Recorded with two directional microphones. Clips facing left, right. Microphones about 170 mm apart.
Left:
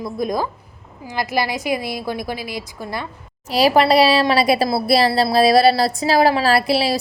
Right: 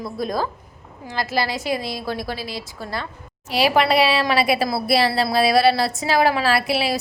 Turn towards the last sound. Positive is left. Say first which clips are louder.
# left 3 dB
turn(degrees=35)  # may be behind; listen again after turning